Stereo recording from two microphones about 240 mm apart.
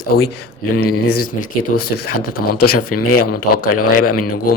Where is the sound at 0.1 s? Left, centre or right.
Left.